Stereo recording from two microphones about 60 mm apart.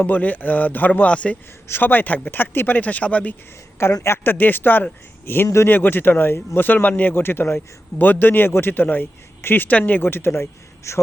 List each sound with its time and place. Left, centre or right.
0.0 s speech: left
1.6 s speech: left
4.0 s speech: left
10.8 s a man's voice: left